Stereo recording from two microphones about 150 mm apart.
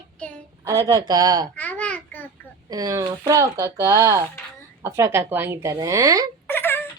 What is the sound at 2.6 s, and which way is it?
Speech, 25° right (ahead or behind).